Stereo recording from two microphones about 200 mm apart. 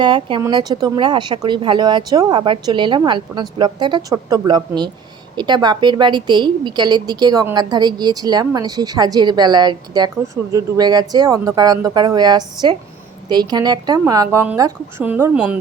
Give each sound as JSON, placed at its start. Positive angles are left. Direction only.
{"t": 0.0, "sound": "a woman's voice", "side_deg": -25}